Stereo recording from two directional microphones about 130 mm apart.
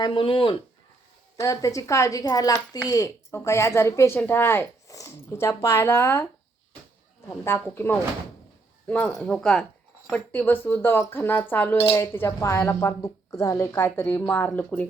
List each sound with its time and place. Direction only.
0.0 s speech: 40° left (ahead or behind)
1.4 s speech: 25° left (ahead or behind)
7.3 s a woman's voice: 20° left (ahead or behind)